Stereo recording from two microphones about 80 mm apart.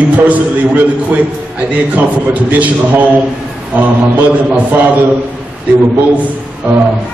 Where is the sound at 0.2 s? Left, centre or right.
Right.